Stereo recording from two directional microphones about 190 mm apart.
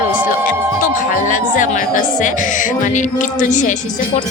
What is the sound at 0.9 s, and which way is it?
Speech, 45° left (ahead or behind).